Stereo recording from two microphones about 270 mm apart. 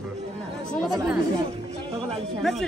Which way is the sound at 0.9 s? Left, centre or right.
Centre.